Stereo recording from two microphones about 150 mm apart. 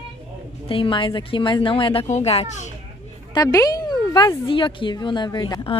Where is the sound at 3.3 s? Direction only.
25° left (ahead or behind).